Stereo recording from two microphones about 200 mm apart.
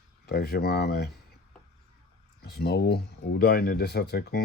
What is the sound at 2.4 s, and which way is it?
Speech, 55° left (ahead or behind).